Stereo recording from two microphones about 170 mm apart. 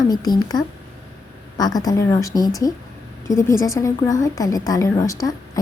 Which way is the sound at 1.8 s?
20° left (ahead or behind).